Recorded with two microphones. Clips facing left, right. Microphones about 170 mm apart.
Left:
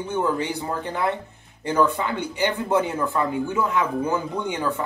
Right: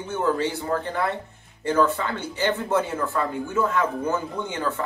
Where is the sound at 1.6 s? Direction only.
15° left (ahead or behind).